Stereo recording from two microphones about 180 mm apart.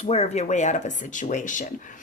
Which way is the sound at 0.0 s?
35° left (ahead or behind).